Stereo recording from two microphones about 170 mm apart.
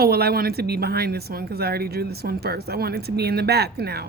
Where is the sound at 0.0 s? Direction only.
70° right (ahead or behind).